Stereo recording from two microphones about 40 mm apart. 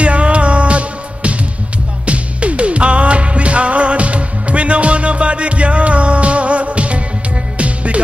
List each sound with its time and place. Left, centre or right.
0.0 s music: right